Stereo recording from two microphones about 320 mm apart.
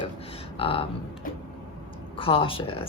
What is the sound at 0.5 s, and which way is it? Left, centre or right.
Speech, centre.